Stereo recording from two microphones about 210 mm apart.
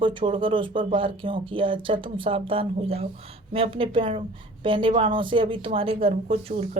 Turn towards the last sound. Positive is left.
turn(degrees=-30)  # may be behind; listen again after turning